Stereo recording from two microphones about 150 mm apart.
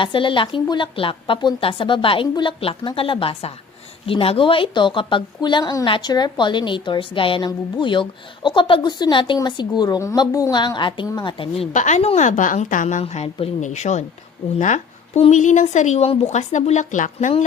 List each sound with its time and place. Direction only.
0.0 s a woman's voice: 35° left (ahead or behind)
11.7 s a woman's voice: 55° left (ahead or behind)
14.6 s a sound: 55° left (ahead or behind)
15.2 s a woman's voice: 55° left (ahead or behind)